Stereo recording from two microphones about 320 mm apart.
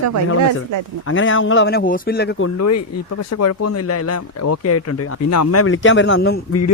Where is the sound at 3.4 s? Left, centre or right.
Left.